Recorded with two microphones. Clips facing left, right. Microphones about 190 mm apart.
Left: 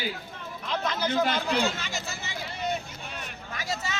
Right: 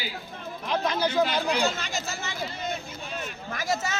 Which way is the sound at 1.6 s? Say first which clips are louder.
Right 1 dB; 45° right (ahead or behind).